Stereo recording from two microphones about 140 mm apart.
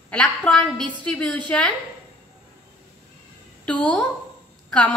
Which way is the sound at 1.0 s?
10° left (ahead or behind).